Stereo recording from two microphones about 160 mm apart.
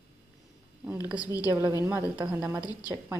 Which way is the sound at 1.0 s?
10° right (ahead or behind).